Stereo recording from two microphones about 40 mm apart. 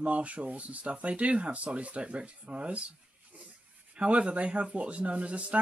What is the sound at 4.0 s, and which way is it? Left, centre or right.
Speech, right.